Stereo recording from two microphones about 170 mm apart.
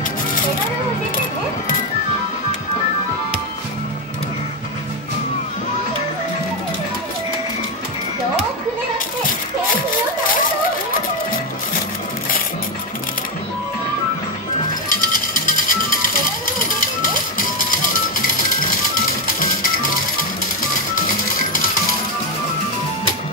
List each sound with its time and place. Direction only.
14.9 s music: 55° left (ahead or behind)
17.6 s music: 55° left (ahead or behind)
19.4 s music: 55° left (ahead or behind)